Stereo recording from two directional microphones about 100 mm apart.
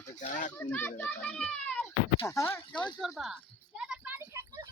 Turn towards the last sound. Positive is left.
turn(degrees=-10)  # may be behind; listen again after turning